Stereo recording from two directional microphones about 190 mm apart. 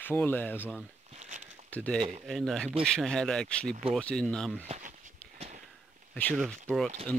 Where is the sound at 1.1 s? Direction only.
35° right (ahead or behind).